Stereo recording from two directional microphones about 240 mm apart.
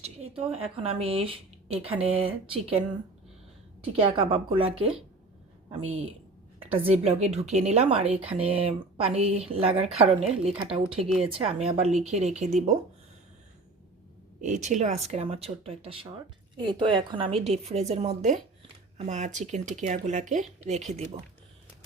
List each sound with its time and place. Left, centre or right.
0.3 s speech: right
3.9 s speech: right
6.6 s speech: right
14.4 s speech: right